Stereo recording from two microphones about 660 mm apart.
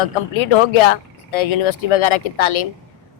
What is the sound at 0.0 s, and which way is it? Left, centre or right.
Speech, left.